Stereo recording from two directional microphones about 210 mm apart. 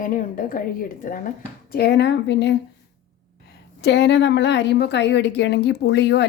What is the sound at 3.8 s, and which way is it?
A woman's voice, 55° left (ahead or behind).